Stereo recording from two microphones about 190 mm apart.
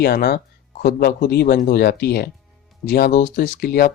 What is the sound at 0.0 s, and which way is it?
Speech, 55° left (ahead or behind).